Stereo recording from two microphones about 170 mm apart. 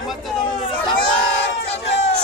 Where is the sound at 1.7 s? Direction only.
35° left (ahead or behind).